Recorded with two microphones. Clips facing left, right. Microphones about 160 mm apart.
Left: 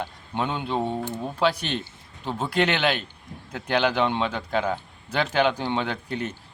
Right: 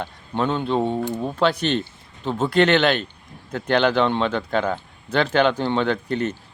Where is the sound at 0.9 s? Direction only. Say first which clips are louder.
Right 5 dB; 15° right (ahead or behind).